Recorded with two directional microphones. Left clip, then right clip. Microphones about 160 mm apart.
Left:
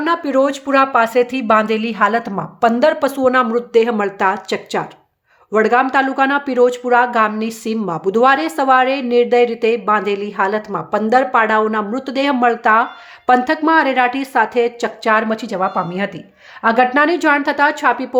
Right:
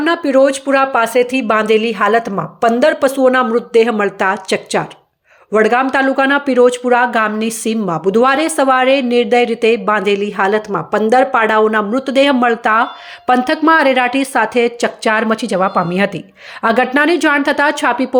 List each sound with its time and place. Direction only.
0.0 s speech: 5° right (ahead or behind)